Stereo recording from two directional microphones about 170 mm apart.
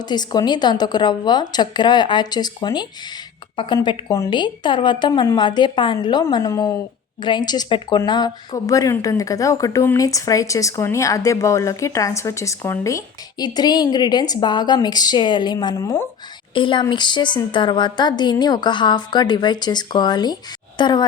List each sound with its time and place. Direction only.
0.0 s speech: 25° left (ahead or behind)
3.8 s speech: 15° left (ahead or behind)
16.6 s speech: 30° left (ahead or behind)